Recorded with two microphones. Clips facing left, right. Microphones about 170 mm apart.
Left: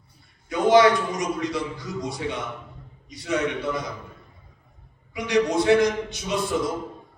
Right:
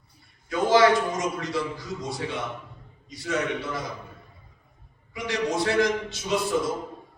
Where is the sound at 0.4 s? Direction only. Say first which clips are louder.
Left 2 dB; 20° left (ahead or behind).